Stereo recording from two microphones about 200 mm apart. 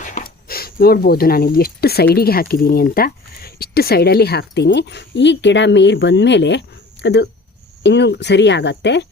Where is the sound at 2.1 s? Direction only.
50° left (ahead or behind).